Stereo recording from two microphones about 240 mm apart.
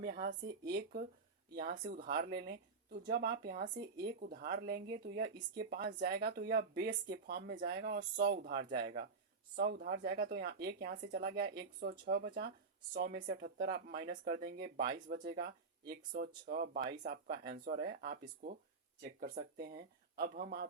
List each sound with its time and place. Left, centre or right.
0.0 s speech: right
1.5 s speech: right